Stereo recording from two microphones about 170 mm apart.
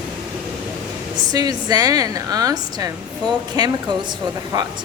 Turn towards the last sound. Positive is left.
turn(degrees=-25)  # may be behind; listen again after turning